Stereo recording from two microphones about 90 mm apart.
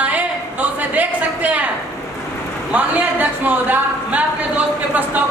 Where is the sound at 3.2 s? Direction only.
20° right (ahead or behind).